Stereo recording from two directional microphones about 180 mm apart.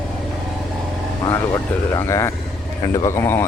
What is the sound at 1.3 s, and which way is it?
Speech, 15° left (ahead or behind).